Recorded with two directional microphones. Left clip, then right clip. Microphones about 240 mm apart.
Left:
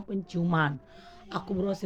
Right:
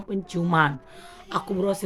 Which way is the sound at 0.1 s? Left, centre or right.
Centre.